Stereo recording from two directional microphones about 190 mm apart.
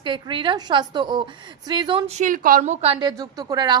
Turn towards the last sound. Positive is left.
turn(degrees=-20)  # may be behind; listen again after turning